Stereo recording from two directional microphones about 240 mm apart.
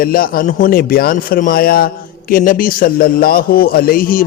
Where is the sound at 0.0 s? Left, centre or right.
Left.